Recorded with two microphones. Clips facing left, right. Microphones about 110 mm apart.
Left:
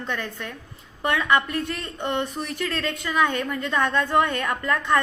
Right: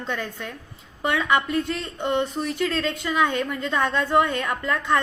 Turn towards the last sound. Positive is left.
turn(degrees=-5)  # may be behind; listen again after turning